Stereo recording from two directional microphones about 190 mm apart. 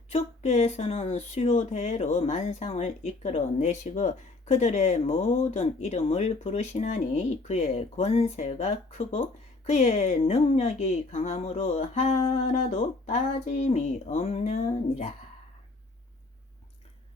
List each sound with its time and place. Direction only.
0.1 s speech: 35° left (ahead or behind)